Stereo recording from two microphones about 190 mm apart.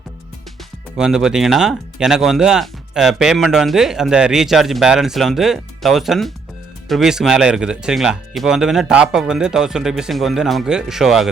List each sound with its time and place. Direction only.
0.9 s speech: 5° right (ahead or behind)